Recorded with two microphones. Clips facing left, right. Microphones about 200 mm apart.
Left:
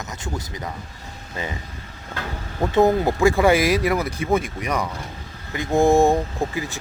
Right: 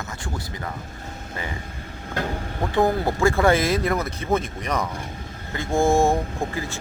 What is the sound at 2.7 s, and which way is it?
Speech, 20° left (ahead or behind).